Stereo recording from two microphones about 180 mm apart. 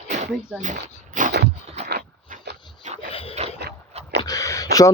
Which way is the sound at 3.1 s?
30° left (ahead or behind).